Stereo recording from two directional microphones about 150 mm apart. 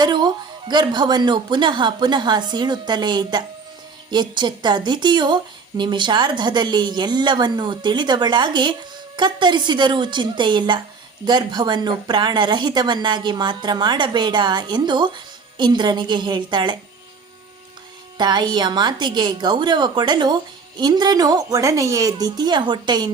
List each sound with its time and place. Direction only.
0.0 s music: 30° right (ahead or behind)
0.7 s a woman's voice: 30° right (ahead or behind)
18.2 s speech: 30° right (ahead or behind)